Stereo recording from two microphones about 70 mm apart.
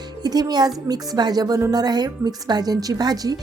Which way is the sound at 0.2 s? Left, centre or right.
Right.